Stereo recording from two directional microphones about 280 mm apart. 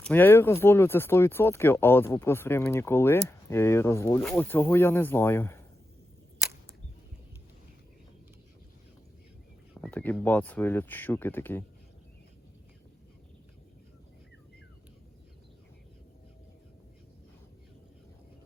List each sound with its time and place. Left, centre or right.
0.0 s speech: centre
9.8 s speech: centre